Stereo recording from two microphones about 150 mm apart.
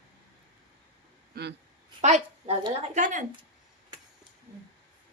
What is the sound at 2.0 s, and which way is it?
A woman's voice, 50° right (ahead or behind).